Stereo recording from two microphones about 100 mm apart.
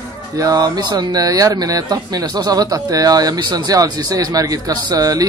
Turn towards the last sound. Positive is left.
turn(degrees=-35)  # may be behind; listen again after turning